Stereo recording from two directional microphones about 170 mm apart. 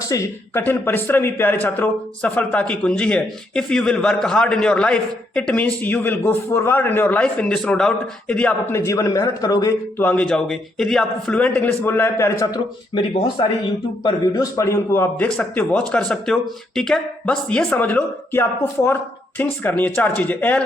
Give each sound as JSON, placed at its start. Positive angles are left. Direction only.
{"t": 0.1, "sound": "a man's voice", "side_deg": 15}
{"t": 12.9, "sound": "a man's voice", "side_deg": 30}